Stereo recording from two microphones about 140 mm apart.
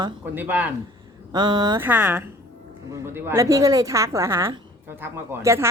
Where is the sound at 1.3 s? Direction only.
30° right (ahead or behind).